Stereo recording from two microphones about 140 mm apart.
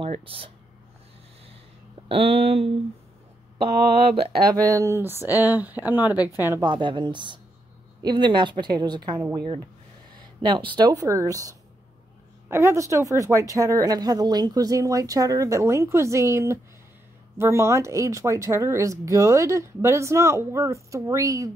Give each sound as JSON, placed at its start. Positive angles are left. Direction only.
{"t": 0.0, "sound": "speech", "side_deg": -40}
{"t": 2.0, "sound": "speech", "side_deg": -40}
{"t": 4.5, "sound": "speech", "side_deg": -25}
{"t": 6.1, "sound": "speech", "side_deg": 25}
{"t": 6.6, "sound": "a woman's voice", "side_deg": -35}